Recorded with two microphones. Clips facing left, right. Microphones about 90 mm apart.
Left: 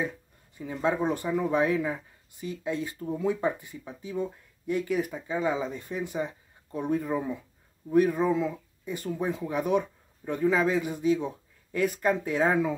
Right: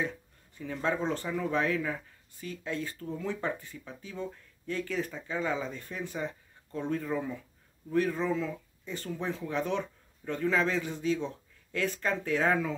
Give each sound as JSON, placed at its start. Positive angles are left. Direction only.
{"t": 0.6, "sound": "speech", "side_deg": 15}